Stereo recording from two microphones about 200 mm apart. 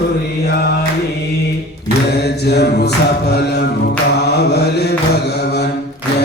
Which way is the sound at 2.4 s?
55° left (ahead or behind).